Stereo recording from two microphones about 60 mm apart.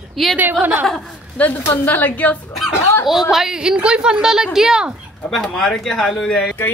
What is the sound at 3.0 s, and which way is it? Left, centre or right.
A woman's voice, centre.